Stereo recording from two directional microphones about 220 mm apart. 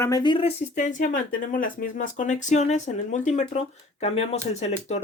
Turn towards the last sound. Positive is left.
turn(degrees=30)  # may be behind; listen again after turning